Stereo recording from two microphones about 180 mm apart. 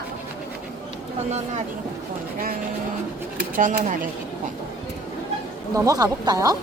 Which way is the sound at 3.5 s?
45° right (ahead or behind).